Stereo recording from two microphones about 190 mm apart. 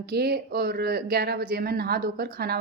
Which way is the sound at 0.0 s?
55° right (ahead or behind).